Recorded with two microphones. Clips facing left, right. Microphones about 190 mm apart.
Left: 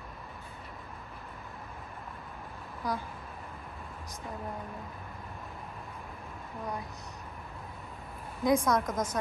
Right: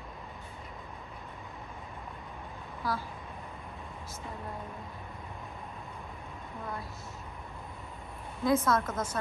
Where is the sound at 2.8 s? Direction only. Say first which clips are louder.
Even; 20° left (ahead or behind).